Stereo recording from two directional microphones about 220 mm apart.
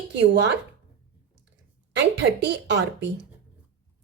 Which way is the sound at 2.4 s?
55° right (ahead or behind).